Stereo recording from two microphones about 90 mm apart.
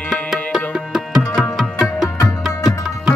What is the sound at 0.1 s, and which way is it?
Tabla, centre (ahead or behind).